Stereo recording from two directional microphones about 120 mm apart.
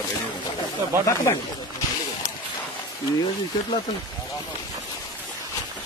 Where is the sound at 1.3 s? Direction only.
25° left (ahead or behind).